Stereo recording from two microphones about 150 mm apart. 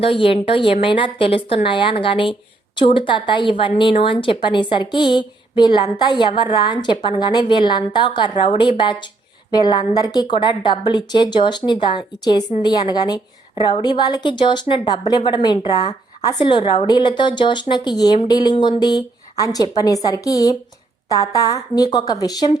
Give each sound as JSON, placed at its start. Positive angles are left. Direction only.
{"t": 0.0, "sound": "a woman's voice", "side_deg": 35}